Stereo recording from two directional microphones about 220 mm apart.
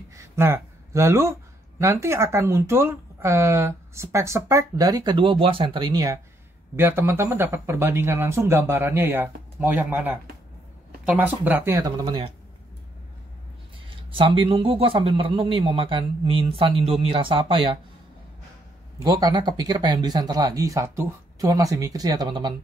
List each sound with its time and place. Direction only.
0.1 s speech: 10° right (ahead or behind)
12.0 s a man's voice: 25° right (ahead or behind)
13.8 s a man's voice: 25° right (ahead or behind)
19.0 s speech: 20° right (ahead or behind)